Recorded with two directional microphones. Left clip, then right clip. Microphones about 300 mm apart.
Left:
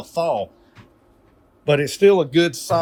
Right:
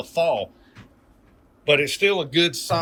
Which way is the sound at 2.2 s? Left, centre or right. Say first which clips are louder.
Left 3 dB; centre.